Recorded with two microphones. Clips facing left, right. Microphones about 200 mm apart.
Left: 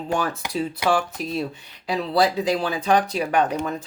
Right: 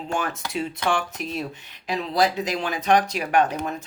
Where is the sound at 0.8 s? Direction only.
10° left (ahead or behind).